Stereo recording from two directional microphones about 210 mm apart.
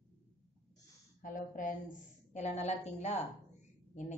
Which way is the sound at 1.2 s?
40° left (ahead or behind).